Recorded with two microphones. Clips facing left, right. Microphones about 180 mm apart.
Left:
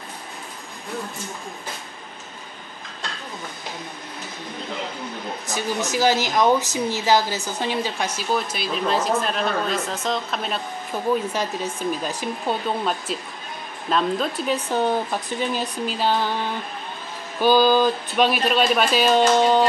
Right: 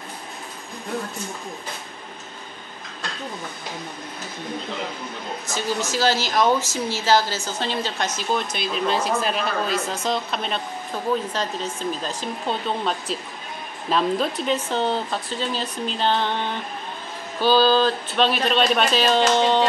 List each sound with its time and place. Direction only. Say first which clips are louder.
5.5 s speech: even; 15° left (ahead or behind); by 10.6 s centre (ahead or behind)
11.9 s speech: left 2 dB; 10° left (ahead or behind)
14.5 s speech: left 3 dB; 10° left (ahead or behind)
17.4 s speech: left 1 dB; 15° left (ahead or behind)